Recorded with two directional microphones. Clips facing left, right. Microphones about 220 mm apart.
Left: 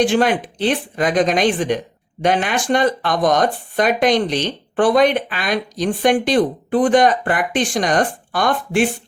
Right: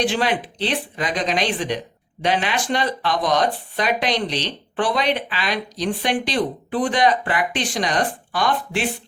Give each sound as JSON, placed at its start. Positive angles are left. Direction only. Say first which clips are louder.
{"t": 0.0, "sound": "speech", "louder": "left 5 dB", "side_deg": 50}